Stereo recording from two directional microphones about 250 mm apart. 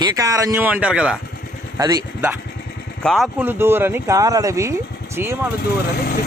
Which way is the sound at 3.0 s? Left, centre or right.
Centre.